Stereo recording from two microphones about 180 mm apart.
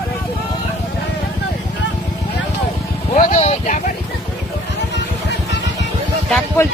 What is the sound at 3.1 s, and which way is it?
Speech, 45° left (ahead or behind).